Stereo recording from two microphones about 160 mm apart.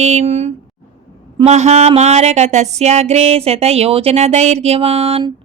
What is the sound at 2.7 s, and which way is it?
Speech, 45° right (ahead or behind).